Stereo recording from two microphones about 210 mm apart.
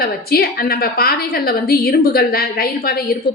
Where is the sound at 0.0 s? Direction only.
45° left (ahead or behind).